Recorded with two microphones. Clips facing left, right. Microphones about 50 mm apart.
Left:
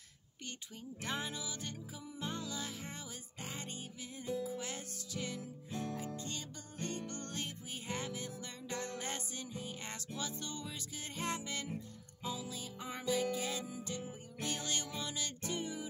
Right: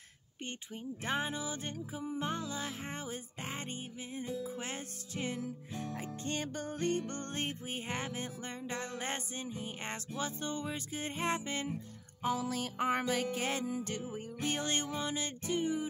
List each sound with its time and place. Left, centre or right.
1.0 s music: right
6.2 s music: right
12.2 s music: right
14.4 s music: right